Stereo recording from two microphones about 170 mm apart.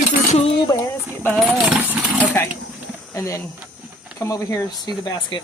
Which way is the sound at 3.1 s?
15° left (ahead or behind).